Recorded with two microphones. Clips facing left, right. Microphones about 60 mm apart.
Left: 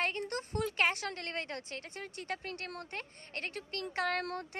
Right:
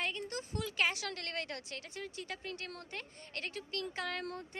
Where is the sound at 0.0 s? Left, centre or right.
Left.